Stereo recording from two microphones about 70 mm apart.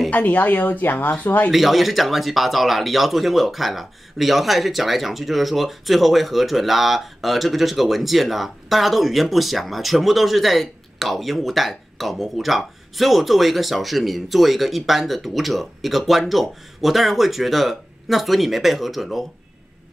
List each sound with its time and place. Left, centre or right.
0.1 s speech: left
1.5 s speech: centre